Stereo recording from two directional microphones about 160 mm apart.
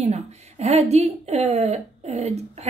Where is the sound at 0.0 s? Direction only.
40° right (ahead or behind).